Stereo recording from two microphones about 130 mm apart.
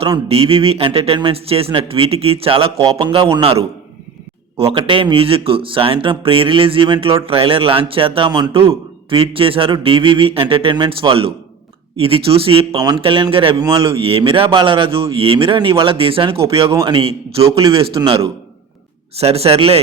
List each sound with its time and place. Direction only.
0.3 s a man's voice: 50° right (ahead or behind)
12.7 s a man's voice: 30° right (ahead or behind)
13.0 s a man's voice: 40° right (ahead or behind)
19.2 s a man's voice: 50° right (ahead or behind)